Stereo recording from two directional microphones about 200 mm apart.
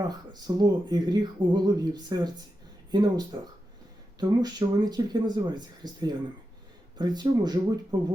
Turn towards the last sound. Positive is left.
turn(degrees=-20)  # may be behind; listen again after turning